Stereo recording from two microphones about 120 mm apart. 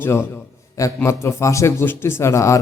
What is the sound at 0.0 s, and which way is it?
Mantra, 20° left (ahead or behind).